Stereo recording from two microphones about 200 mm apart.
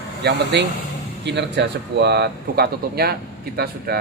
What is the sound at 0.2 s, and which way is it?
Speech, 55° right (ahead or behind).